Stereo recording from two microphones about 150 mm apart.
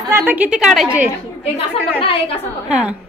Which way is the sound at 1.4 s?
40° left (ahead or behind).